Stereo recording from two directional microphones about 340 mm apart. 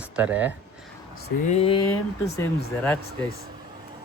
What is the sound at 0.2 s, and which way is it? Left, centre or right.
Speech, centre.